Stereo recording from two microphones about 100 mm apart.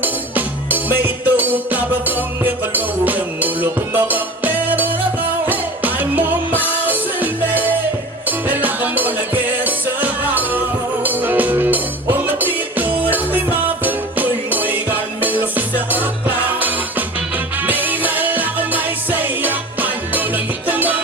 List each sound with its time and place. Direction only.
0.0 s music: 15° right (ahead or behind)